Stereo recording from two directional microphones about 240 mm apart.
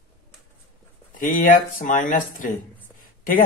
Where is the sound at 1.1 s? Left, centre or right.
Left.